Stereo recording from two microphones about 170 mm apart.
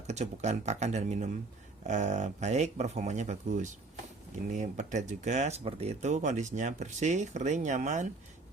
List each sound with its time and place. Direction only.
0.1 s speech: 40° right (ahead or behind)